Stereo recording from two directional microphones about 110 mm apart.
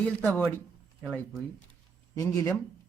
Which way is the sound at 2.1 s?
30° left (ahead or behind).